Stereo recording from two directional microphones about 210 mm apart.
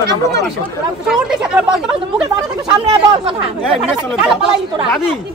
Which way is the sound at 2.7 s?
25° right (ahead or behind).